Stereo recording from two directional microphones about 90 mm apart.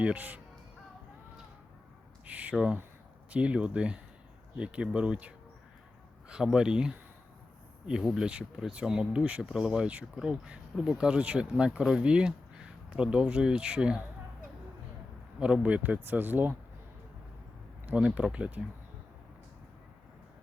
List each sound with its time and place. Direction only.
0.0 s speech: 15° right (ahead or behind)
2.2 s a sound: 15° right (ahead or behind)
3.2 s speech: 15° right (ahead or behind)
15.4 s speech: 10° right (ahead or behind)
17.8 s speech: 15° right (ahead or behind)